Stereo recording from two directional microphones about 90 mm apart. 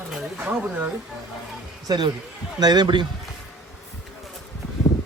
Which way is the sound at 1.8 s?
50° right (ahead or behind).